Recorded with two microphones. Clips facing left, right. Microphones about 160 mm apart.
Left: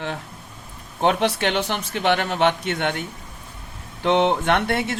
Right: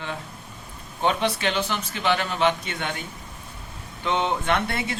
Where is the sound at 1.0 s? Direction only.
65° left (ahead or behind).